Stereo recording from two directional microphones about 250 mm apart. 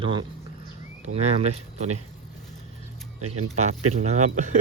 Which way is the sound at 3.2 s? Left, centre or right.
Right.